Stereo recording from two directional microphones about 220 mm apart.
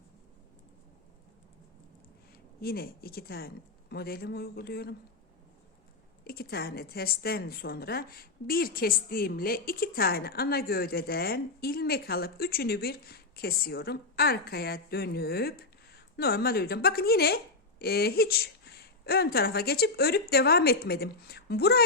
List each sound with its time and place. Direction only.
2.6 s a woman's voice: 45° left (ahead or behind)
6.2 s a woman's voice: 45° left (ahead or behind)